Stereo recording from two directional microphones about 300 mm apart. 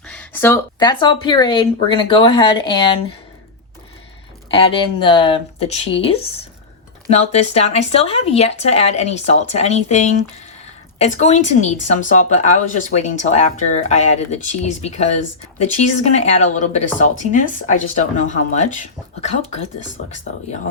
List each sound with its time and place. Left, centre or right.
0.1 s speech: centre
4.5 s speech: centre